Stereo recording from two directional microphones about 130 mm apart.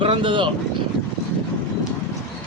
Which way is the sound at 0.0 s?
40° right (ahead or behind).